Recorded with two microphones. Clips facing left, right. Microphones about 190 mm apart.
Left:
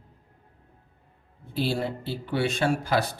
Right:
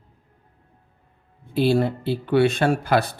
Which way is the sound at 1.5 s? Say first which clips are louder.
Right 8 dB; 60° right (ahead or behind).